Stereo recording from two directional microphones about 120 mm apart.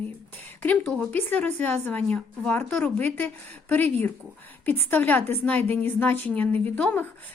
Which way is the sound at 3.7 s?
15° left (ahead or behind).